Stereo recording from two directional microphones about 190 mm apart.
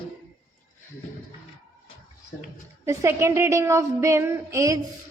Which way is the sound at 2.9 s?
15° right (ahead or behind).